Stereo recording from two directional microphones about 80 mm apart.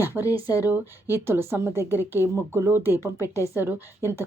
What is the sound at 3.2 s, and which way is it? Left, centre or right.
Speech, left.